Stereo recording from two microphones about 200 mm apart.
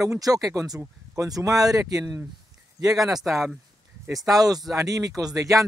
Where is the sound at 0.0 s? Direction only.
15° right (ahead or behind).